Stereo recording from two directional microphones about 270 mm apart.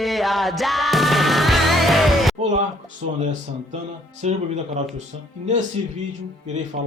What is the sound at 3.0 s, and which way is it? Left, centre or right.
Speech, right.